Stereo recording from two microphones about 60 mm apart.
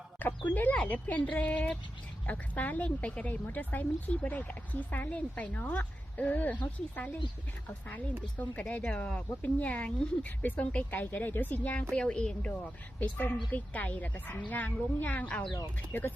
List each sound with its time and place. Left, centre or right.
0.2 s speech: left
11.9 s a woman's voice: centre
13.0 s speech: left
15.9 s speech: left